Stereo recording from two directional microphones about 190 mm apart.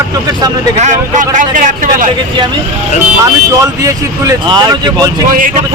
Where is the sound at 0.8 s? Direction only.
40° right (ahead or behind).